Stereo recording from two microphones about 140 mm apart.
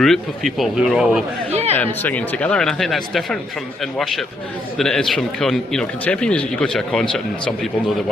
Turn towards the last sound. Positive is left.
turn(degrees=5)  # may be behind; listen again after turning